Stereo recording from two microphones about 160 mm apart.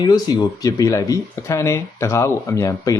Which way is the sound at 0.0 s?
25° left (ahead or behind).